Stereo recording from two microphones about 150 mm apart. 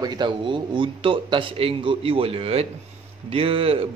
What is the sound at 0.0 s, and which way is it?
A man's voice, 30° right (ahead or behind).